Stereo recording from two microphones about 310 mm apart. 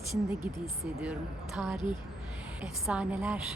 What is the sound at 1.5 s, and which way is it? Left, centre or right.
Speech, centre.